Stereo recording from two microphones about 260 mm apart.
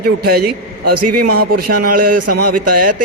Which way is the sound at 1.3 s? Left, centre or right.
Right.